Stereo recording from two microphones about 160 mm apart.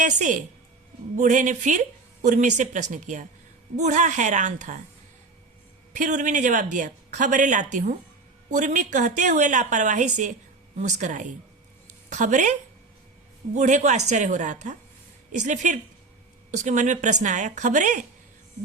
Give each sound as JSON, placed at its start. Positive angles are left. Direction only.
{"t": 0.0, "sound": "speech", "side_deg": -50}
{"t": 5.9, "sound": "a woman's voice", "side_deg": -50}